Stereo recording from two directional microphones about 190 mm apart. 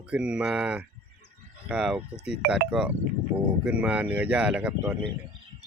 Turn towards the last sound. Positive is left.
turn(degrees=-5)  # may be behind; listen again after turning